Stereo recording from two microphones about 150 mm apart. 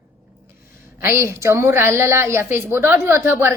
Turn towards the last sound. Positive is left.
turn(degrees=-15)  # may be behind; listen again after turning